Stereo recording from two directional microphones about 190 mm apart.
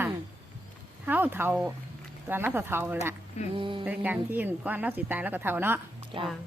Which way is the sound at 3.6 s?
25° right (ahead or behind).